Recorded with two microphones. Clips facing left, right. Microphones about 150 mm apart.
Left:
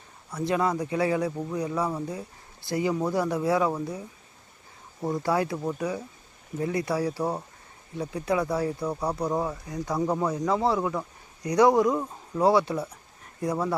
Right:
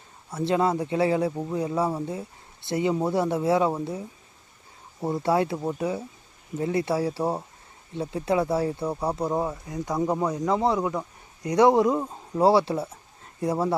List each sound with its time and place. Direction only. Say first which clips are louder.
0.3 s speech: right 2 dB; 25° right (ahead or behind)
5.0 s speech: right 2 dB; 25° right (ahead or behind)